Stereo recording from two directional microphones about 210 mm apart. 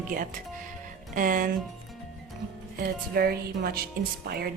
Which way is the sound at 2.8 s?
45° right (ahead or behind).